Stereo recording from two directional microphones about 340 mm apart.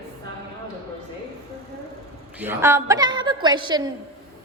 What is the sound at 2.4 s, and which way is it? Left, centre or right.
A woman's voice, centre.